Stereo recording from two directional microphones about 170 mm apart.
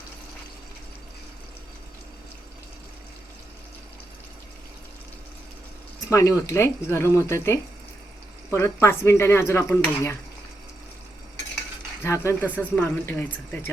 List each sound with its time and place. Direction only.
6.1 s speech: 15° left (ahead or behind)
12.0 s speech: 15° left (ahead or behind)